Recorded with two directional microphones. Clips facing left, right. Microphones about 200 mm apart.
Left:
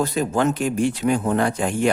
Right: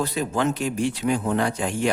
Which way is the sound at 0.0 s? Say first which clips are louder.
Left 3 dB; 45° left (ahead or behind).